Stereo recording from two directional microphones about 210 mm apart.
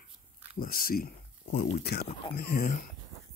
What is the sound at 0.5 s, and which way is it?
Speech, 45° left (ahead or behind).